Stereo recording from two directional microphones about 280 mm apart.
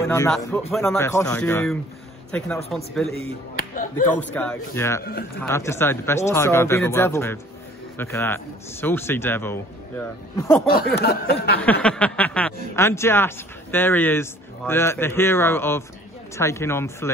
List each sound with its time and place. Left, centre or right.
0.0 s a man's voice: centre
3.5 s a sound: left
4.2 s a man's voice: centre
5.0 s speech: left
5.4 s speech: centre
11.0 s speech: left
11.6 s speech: centre